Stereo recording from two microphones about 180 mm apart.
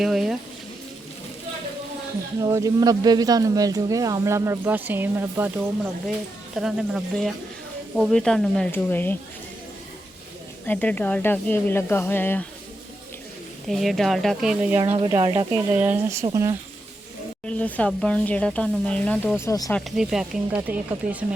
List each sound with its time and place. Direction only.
0.0 s speech: centre (ahead or behind)
2.4 s speech: 20° right (ahead or behind); by 9.1 s 10° left (ahead or behind)
10.7 s speech: 10° left (ahead or behind)
13.7 s speech: centre (ahead or behind)
14.9 s speech: 30° right (ahead or behind)
15.7 s speech: 10° right (ahead or behind)
17.4 s speech: 5° left (ahead or behind)
19.4 s speech: 20° left (ahead or behind)
20.0 s speech: 5° right (ahead or behind)